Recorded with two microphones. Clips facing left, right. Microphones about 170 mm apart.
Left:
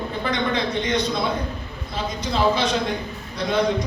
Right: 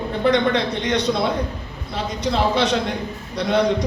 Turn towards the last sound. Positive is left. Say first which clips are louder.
# right 3 dB
turn(degrees=-70)  # may be behind; listen again after turning